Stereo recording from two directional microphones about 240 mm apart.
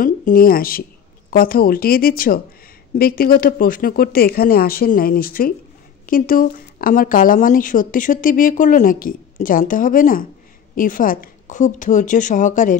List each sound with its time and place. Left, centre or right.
0.0 s a woman's voice: left